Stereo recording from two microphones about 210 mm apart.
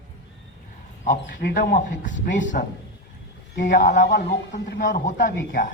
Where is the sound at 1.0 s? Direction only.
40° left (ahead or behind).